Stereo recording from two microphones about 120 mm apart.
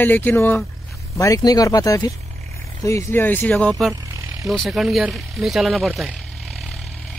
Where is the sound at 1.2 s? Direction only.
30° left (ahead or behind).